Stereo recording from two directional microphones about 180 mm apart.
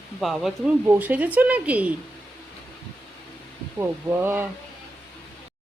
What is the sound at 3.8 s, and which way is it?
Speech, 15° right (ahead or behind).